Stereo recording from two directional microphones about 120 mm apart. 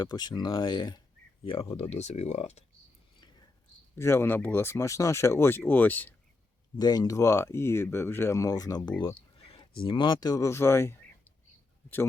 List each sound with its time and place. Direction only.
0.0 s speech: 35° left (ahead or behind)
1.7 s speech: 60° left (ahead or behind)
3.9 s speech: 20° left (ahead or behind)
6.7 s speech: 35° left (ahead or behind)
9.4 s speech: 50° left (ahead or behind); by 10.9 s 20° left (ahead or behind)